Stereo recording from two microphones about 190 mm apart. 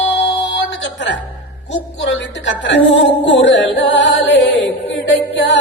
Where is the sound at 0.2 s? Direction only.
70° left (ahead or behind).